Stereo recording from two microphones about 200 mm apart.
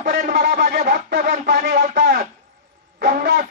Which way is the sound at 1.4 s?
65° right (ahead or behind).